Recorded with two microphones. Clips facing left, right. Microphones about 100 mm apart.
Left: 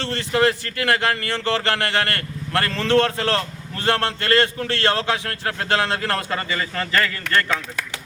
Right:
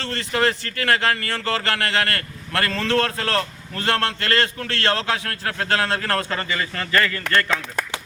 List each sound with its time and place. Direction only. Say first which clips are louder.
0.0 s speech: left 2 dB; 20° left (ahead or behind)